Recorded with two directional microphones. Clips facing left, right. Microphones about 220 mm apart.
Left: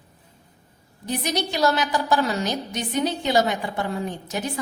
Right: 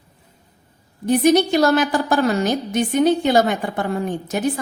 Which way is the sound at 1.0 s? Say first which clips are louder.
Right 11 dB; 50° right (ahead or behind).